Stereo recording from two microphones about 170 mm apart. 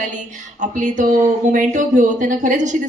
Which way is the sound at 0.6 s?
45° right (ahead or behind).